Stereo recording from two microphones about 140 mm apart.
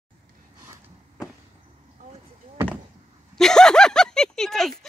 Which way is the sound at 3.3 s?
5° left (ahead or behind).